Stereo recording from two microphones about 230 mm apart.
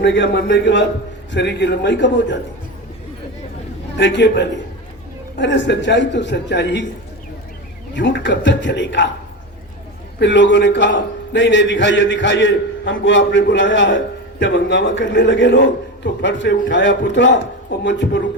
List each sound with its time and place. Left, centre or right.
0.0 s a man's voice: left
3.9 s a man's voice: left
7.9 s a man's voice: left
10.2 s a man's voice: left